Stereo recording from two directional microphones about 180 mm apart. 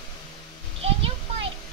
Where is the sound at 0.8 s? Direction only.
35° right (ahead or behind).